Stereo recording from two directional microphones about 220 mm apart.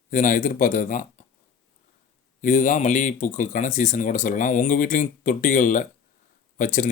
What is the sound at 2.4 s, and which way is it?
Speech, 35° left (ahead or behind).